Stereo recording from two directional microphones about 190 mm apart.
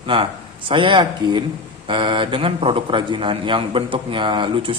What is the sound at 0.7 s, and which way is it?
Speech, 25° right (ahead or behind).